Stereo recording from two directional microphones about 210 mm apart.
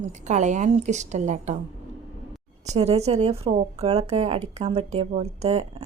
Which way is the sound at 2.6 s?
30° right (ahead or behind).